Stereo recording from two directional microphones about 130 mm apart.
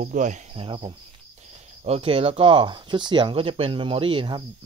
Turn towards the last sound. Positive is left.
turn(degrees=-40)  # may be behind; listen again after turning